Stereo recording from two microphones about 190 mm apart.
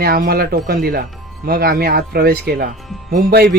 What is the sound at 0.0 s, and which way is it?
Speech, 50° right (ahead or behind).